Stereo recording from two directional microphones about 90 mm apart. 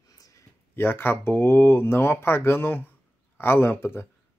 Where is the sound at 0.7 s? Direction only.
25° left (ahead or behind).